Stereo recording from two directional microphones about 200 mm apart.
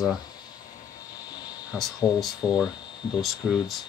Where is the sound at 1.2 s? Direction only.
20° left (ahead or behind).